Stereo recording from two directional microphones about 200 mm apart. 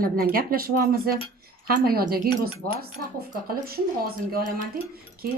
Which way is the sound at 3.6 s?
50° right (ahead or behind).